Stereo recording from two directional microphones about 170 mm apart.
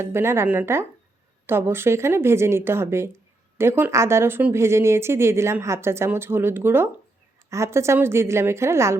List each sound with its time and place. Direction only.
0.0 s speech: 15° right (ahead or behind)